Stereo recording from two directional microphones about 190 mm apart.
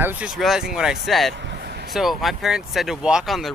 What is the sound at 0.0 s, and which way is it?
Speech, 5° right (ahead or behind).